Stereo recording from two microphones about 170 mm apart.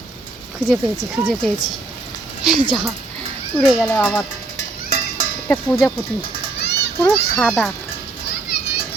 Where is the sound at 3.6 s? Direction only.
5° left (ahead or behind).